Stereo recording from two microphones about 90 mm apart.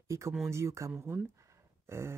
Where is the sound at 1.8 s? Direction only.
30° right (ahead or behind).